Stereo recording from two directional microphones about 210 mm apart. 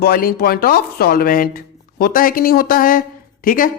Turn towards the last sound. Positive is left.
turn(degrees=40)  # may be behind; listen again after turning